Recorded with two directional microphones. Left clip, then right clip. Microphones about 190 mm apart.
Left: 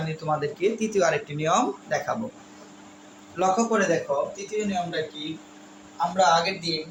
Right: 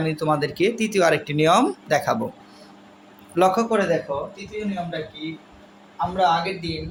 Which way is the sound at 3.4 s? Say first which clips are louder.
Right 4 dB; 65° right (ahead or behind).